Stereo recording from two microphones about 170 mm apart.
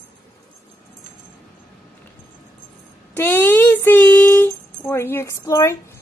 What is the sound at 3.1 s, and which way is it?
Speech, 10° left (ahead or behind).